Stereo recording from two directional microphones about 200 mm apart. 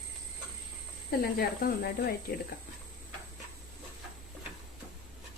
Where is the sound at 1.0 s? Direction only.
50° left (ahead or behind).